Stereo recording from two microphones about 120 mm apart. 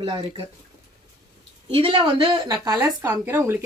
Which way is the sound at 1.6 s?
50° right (ahead or behind).